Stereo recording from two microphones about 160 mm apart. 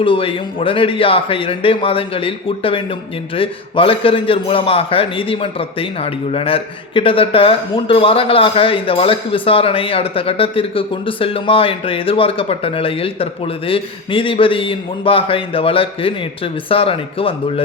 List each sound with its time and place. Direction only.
0.0 s a man's voice: 35° left (ahead or behind)